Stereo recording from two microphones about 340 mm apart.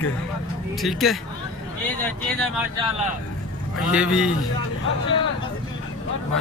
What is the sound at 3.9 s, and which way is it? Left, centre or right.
Speech, centre.